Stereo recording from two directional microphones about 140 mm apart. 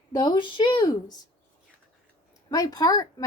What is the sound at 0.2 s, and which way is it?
Speech, 35° left (ahead or behind).